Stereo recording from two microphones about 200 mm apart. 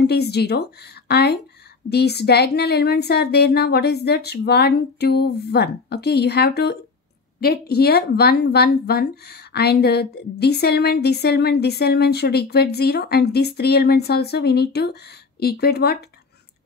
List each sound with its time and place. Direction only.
0.0 s speech: 55° left (ahead or behind)